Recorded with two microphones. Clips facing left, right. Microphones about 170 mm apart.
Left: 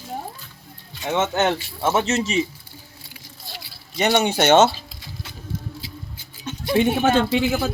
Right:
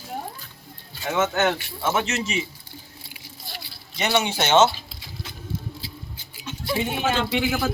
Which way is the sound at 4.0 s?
45° left (ahead or behind).